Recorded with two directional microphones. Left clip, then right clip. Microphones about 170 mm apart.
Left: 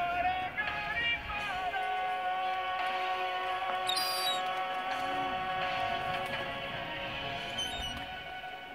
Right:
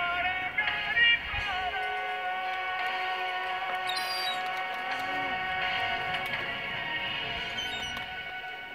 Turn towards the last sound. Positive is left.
turn(degrees=50)  # may be behind; listen again after turning